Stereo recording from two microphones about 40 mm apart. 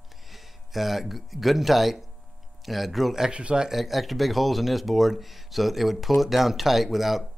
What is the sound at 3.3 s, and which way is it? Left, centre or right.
Speech, right.